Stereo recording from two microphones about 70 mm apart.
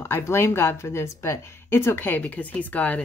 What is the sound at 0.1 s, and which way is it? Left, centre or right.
A woman's voice, left.